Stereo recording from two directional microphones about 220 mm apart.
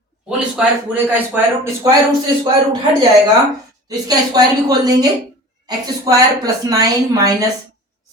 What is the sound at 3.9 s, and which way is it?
A woman's voice, 15° right (ahead or behind).